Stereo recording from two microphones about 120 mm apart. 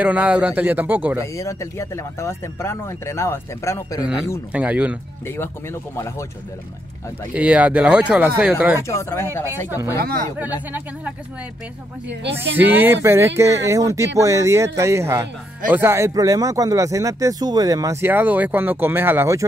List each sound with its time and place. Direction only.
0.0 s speech: 10° right (ahead or behind)
1.2 s speech: 25° left (ahead or behind)
4.0 s speech: 5° right (ahead or behind)
5.2 s speech: 20° left (ahead or behind)
7.3 s speech: 10° right (ahead or behind)
8.8 s speech: 25° left (ahead or behind)
12.4 s speech: 15° right (ahead or behind)
16.1 s speech: 30° right (ahead or behind)
18.0 s speech: 15° right (ahead or behind)